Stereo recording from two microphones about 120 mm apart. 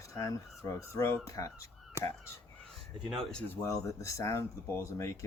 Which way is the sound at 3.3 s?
10° left (ahead or behind).